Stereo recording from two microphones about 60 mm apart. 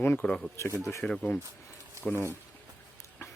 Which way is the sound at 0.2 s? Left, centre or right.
Centre.